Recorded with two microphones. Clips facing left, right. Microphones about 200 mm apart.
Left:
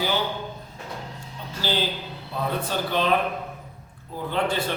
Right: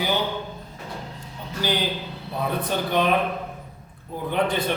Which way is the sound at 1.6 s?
15° right (ahead or behind).